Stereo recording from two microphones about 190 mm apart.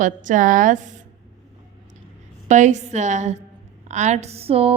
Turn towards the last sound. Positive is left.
turn(degrees=-30)  # may be behind; listen again after turning